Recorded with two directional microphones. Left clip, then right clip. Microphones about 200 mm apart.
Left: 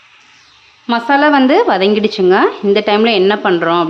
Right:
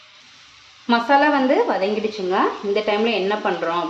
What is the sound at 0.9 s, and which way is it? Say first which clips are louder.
A woman's voice: left 5 dB; 25° left (ahead or behind).